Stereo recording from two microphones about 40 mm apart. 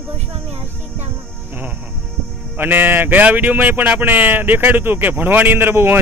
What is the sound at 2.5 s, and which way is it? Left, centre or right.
Speech, right.